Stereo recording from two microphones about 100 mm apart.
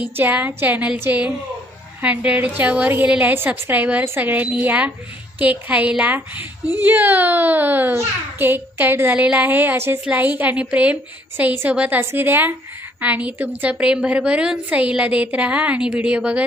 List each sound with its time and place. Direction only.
0.0 s a woman's voice: 15° right (ahead or behind)